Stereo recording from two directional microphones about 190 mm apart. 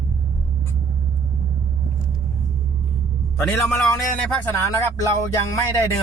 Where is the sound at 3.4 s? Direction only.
5° left (ahead or behind).